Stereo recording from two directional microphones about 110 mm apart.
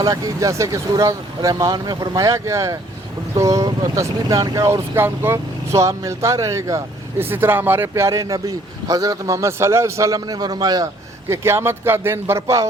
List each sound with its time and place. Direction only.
0.0 s speech: 30° right (ahead or behind)
11.3 s speech: 25° right (ahead or behind)